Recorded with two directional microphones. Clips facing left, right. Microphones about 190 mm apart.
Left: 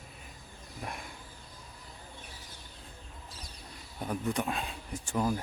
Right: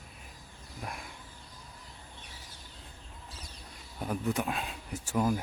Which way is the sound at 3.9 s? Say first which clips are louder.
Right 1 dB; 5° right (ahead or behind).